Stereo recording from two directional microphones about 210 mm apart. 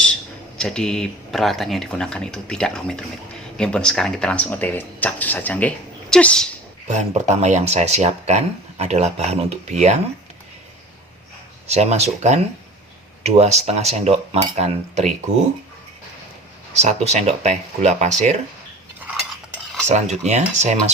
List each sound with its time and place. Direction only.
0.5 s speech: 5° left (ahead or behind)
6.8 s speech: 35° right (ahead or behind)
11.7 s speech: 30° right (ahead or behind)
16.7 s speech: 30° right (ahead or behind)
19.9 s speech: 35° right (ahead or behind)